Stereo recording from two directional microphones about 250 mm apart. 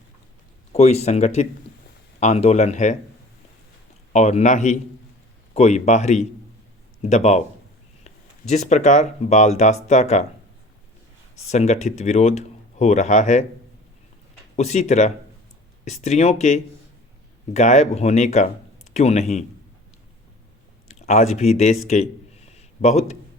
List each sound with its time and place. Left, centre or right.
0.7 s speech: left
4.1 s speech: left
11.5 s speech: left
14.5 s a man's voice: left
20.8 s speech: left
22.5 s a sound: left